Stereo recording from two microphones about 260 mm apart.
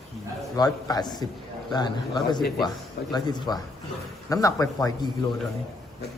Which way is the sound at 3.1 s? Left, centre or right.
Centre.